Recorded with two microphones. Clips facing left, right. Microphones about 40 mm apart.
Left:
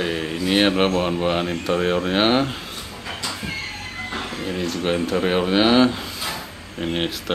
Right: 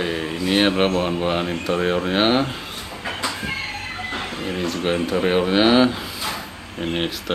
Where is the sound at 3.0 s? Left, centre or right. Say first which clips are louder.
Right 4 dB; right.